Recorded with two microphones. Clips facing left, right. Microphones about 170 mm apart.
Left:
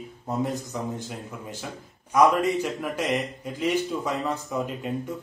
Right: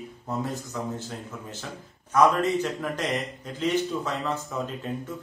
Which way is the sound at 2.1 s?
10° left (ahead or behind).